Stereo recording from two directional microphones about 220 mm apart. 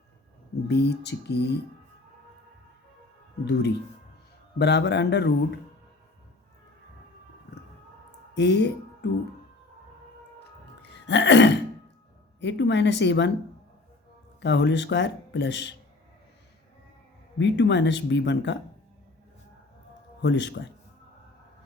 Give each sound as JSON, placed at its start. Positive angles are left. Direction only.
{"t": 0.7, "sound": "speech", "side_deg": 50}
{"t": 3.4, "sound": "speech", "side_deg": 50}
{"t": 8.4, "sound": "speech", "side_deg": 50}
{"t": 10.9, "sound": "throat clearing", "side_deg": 55}
{"t": 12.4, "sound": "speech", "side_deg": 55}
{"t": 14.4, "sound": "speech", "side_deg": 55}
{"t": 17.3, "sound": "speech", "side_deg": 55}
{"t": 20.2, "sound": "speech", "side_deg": 55}